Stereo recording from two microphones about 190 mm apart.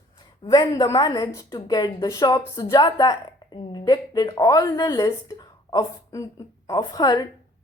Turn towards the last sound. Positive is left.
turn(degrees=20)  # may be behind; listen again after turning